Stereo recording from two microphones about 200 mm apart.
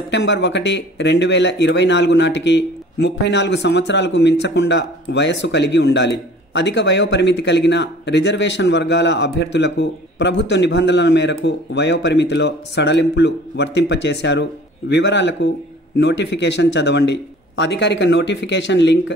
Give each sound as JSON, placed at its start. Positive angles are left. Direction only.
{"t": 0.1, "sound": "speech", "side_deg": 60}